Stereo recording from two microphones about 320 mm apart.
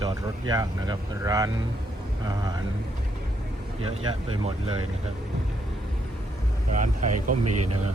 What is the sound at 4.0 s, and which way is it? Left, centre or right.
Speech, right.